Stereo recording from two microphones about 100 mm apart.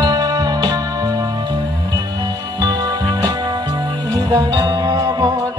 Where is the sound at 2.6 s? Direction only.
40° right (ahead or behind).